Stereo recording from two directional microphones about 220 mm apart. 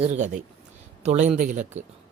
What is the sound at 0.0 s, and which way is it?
Speech, 30° right (ahead or behind).